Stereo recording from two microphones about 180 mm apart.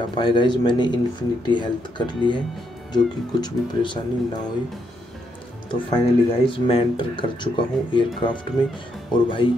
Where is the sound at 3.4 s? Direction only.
25° left (ahead or behind).